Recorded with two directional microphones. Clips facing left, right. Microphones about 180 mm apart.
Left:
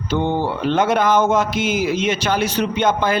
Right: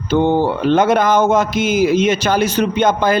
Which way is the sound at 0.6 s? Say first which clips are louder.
Right 3 dB; 45° right (ahead or behind).